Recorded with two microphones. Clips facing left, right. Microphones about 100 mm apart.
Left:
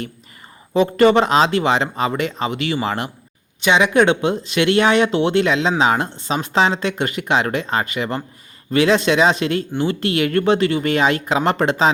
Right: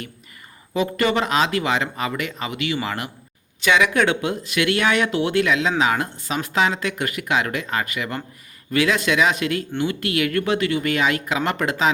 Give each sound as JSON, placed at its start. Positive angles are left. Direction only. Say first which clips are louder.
{"t": 0.7, "sound": "speech", "louder": "left 7 dB", "side_deg": 30}